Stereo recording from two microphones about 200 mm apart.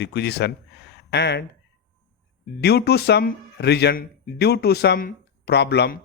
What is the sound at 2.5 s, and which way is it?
Speech, 55° left (ahead or behind).